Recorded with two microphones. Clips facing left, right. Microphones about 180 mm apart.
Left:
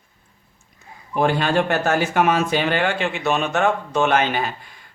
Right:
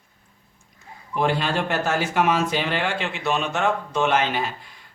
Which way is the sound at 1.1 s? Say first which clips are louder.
Left 4 dB; 50° left (ahead or behind).